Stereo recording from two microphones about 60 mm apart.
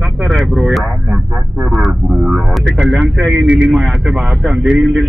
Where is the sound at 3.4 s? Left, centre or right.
Centre.